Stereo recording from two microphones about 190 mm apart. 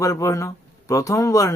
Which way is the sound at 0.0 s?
15° left (ahead or behind).